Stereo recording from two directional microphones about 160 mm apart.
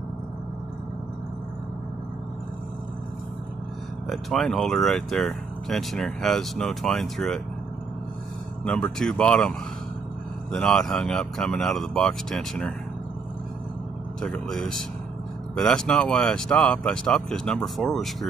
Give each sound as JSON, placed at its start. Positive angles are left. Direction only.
{"t": 4.1, "sound": "speech", "side_deg": 0}
{"t": 8.9, "sound": "speech", "side_deg": 5}
{"t": 14.2, "sound": "speech", "side_deg": 5}